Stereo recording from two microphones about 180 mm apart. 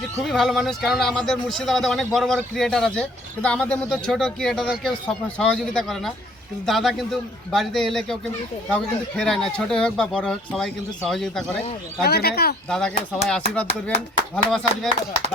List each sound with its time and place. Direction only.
0.3 s speech: centre (ahead or behind)
9.1 s speech: 5° left (ahead or behind)
12.0 s speech: 60° left (ahead or behind)
12.6 s speech: 5° left (ahead or behind)